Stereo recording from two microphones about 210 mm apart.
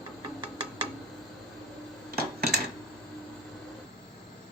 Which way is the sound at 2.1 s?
50° right (ahead or behind).